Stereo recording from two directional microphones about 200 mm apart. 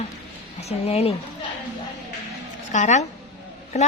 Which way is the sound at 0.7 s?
30° left (ahead or behind).